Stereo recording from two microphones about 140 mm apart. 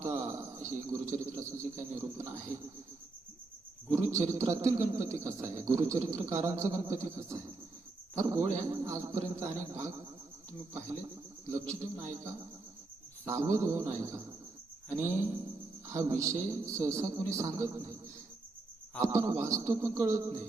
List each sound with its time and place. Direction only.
0.0 s a sound: 20° right (ahead or behind)
1.4 s a man's voice: 20° right (ahead or behind)
3.9 s a man's voice: 20° right (ahead or behind)
11.7 s a man's voice: 20° right (ahead or behind)
19.0 s a man's voice: 20° right (ahead or behind)